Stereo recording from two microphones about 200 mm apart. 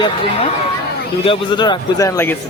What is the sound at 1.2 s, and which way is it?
Speech, 25° left (ahead or behind).